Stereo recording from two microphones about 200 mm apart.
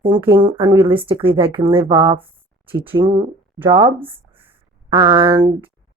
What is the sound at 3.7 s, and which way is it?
Speech, 25° right (ahead or behind).